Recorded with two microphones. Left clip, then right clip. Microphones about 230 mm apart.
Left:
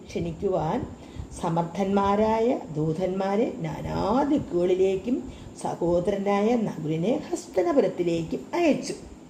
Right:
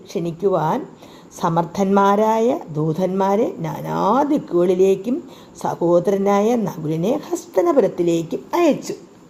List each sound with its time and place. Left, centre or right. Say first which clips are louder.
0.1 s speech: right 8 dB; right